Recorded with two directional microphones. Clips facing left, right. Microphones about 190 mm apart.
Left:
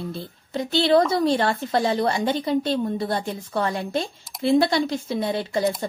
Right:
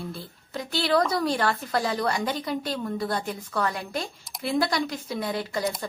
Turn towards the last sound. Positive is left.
turn(degrees=25)  # may be behind; listen again after turning